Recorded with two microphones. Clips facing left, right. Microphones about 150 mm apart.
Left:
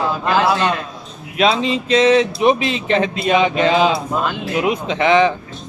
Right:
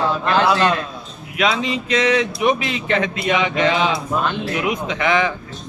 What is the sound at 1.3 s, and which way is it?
Speech, 30° left (ahead or behind).